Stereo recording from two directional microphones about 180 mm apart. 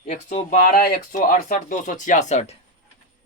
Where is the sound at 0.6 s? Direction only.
55° left (ahead or behind).